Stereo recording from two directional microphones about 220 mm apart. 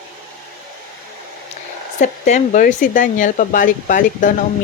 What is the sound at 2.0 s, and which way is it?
Speech, 35° left (ahead or behind).